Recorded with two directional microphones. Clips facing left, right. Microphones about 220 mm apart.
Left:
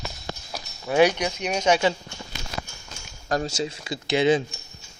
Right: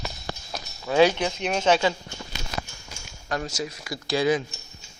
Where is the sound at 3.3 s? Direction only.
30° left (ahead or behind).